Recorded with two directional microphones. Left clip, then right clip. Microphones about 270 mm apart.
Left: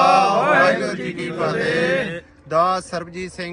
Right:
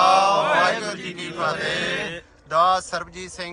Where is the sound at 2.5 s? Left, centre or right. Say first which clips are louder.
Even; centre.